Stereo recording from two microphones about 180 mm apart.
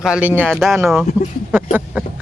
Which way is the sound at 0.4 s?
Centre (ahead or behind).